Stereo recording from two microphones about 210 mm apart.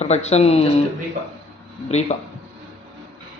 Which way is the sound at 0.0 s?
30° left (ahead or behind).